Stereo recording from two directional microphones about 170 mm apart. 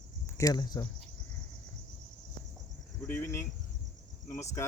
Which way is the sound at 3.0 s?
15° left (ahead or behind).